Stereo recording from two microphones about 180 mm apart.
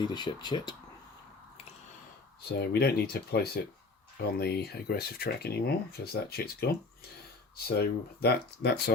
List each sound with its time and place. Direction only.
0.0 s speech: 25° left (ahead or behind)
2.5 s speech: 60° left (ahead or behind)